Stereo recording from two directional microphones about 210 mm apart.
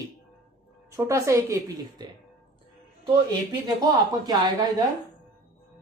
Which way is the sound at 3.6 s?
20° right (ahead or behind).